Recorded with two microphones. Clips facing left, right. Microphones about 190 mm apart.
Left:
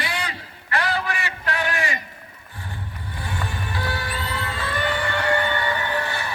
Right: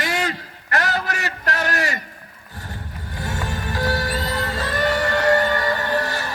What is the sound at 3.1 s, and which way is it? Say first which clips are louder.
Music: right 3 dB; 40° right (ahead or behind).